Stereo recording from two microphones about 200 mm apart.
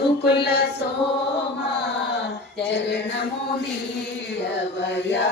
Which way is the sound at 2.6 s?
60° left (ahead or behind).